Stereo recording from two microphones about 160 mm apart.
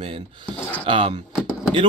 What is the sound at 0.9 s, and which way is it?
Speech, 35° right (ahead or behind).